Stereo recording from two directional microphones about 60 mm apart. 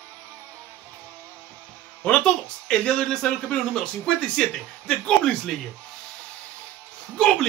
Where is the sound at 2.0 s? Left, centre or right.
Centre.